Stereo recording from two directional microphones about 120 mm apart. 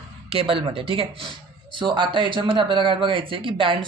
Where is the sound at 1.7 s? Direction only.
40° right (ahead or behind).